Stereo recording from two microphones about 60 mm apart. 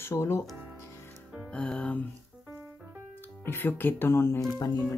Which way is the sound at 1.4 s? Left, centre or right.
Centre.